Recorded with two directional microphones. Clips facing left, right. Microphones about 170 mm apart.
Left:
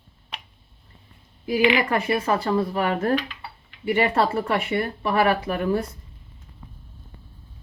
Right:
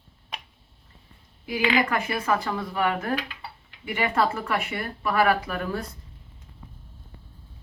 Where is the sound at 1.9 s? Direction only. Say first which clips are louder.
Left 3 dB; 30° left (ahead or behind).